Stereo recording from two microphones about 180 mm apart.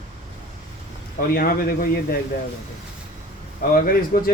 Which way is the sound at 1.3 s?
55° left (ahead or behind).